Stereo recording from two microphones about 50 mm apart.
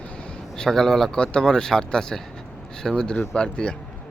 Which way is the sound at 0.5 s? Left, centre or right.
Centre.